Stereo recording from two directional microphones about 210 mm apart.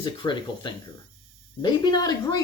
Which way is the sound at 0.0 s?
20° left (ahead or behind).